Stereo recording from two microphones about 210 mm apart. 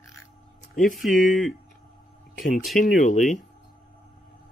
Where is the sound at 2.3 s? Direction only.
40° left (ahead or behind).